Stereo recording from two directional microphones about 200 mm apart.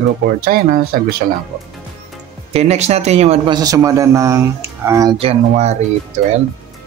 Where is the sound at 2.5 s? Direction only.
35° right (ahead or behind); by 5.1 s 15° right (ahead or behind).